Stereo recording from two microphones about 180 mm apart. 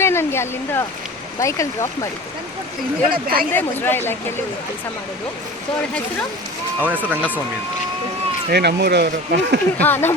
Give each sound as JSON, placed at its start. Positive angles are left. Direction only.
{"t": 0.0, "sound": "speech", "side_deg": 15}
{"t": 3.1, "sound": "speech", "side_deg": -55}
{"t": 3.5, "sound": "speech", "side_deg": 10}
{"t": 6.8, "sound": "speech", "side_deg": -10}
{"t": 8.4, "sound": "speech", "side_deg": -65}
{"t": 9.8, "sound": "speech", "side_deg": 10}